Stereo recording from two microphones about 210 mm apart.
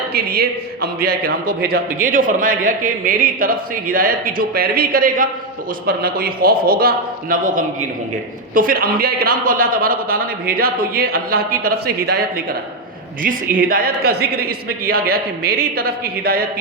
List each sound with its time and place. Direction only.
0.1 s a man's voice: 45° right (ahead or behind)
13.2 s a man's voice: 45° right (ahead or behind)